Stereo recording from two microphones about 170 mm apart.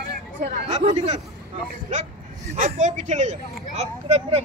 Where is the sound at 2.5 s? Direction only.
45° right (ahead or behind).